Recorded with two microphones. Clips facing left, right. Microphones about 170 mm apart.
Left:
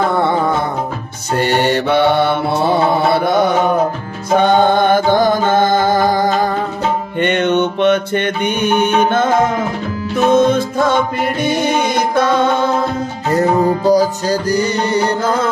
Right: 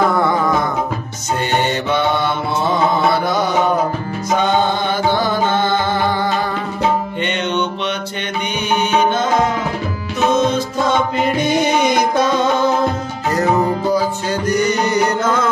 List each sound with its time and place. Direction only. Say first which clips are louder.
1.6 s mantra: left 4 dB; 65° left (ahead or behind)
4.3 s music: left 5 dB; 55° left (ahead or behind)
7.2 s music: left 6 dB; 55° left (ahead or behind)
13.3 s music: left 3 dB; 35° left (ahead or behind)